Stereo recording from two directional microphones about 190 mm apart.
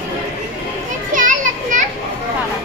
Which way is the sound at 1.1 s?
45° right (ahead or behind).